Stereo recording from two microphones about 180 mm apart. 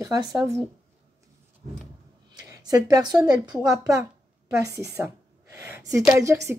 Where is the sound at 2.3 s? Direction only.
20° right (ahead or behind).